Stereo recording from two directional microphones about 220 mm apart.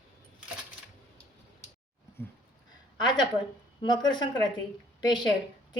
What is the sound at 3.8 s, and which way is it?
Speech, 20° left (ahead or behind).